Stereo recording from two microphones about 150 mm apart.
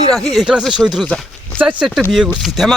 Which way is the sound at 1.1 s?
5° left (ahead or behind).